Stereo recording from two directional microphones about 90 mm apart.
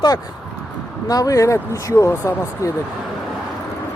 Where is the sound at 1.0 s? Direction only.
40° left (ahead or behind).